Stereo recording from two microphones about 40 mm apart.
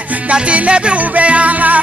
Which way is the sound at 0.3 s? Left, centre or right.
Right.